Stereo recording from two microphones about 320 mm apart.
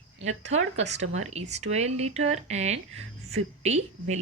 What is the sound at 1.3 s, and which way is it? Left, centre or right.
Speech, centre.